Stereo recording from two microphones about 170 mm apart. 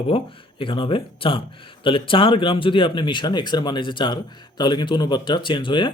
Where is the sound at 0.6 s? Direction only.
30° left (ahead or behind).